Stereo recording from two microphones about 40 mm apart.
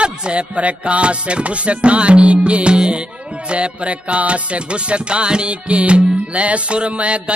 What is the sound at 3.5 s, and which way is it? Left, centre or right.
Music, right.